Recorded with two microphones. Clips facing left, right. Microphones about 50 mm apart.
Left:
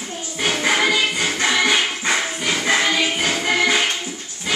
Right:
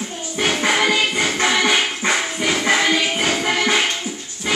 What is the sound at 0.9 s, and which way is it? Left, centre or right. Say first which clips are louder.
Music: right 1 dB; centre.